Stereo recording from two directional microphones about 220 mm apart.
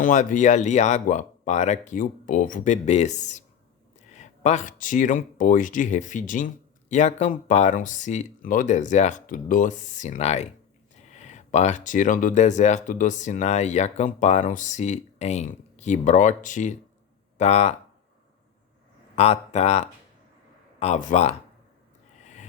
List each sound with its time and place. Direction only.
0.0 s speech: 35° left (ahead or behind)
19.1 s speech: 30° left (ahead or behind)
22.2 s a sound: 30° left (ahead or behind)